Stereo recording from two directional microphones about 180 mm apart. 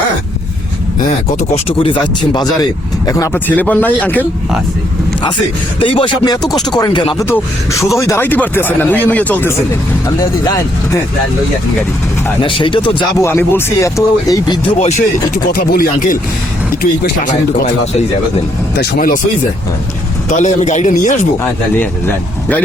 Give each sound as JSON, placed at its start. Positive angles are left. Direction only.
{"t": 0.9, "sound": "speech", "side_deg": 45}
{"t": 5.8, "sound": "speech", "side_deg": 30}
{"t": 7.3, "sound": "speech", "side_deg": 15}
{"t": 12.4, "sound": "speech", "side_deg": 30}
{"t": 13.2, "sound": "speech", "side_deg": 15}
{"t": 14.8, "sound": "speech", "side_deg": 40}
{"t": 15.5, "sound": "speech", "side_deg": 50}
{"t": 18.8, "sound": "speech", "side_deg": 50}
{"t": 20.3, "sound": "speech", "side_deg": 40}
{"t": 21.4, "sound": "speech", "side_deg": 10}